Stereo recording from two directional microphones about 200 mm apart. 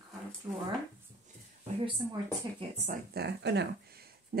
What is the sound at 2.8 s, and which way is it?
Speech, 55° right (ahead or behind).